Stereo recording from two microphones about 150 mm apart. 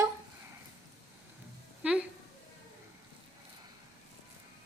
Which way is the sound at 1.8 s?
10° right (ahead or behind).